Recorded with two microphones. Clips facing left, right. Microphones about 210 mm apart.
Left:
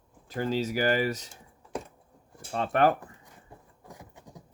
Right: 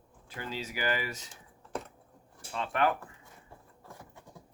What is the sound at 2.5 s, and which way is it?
Speech, 40° left (ahead or behind).